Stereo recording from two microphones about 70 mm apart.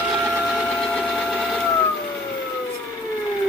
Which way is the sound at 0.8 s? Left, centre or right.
Centre.